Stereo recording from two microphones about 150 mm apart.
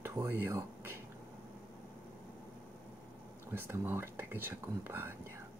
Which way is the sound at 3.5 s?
15° right (ahead or behind).